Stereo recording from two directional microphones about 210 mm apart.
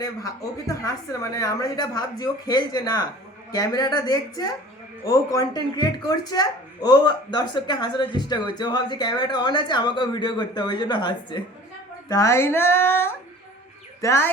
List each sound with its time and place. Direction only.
0.0 s speech: 15° left (ahead or behind)